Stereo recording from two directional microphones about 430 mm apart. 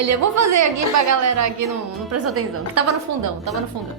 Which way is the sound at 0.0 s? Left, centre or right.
Right.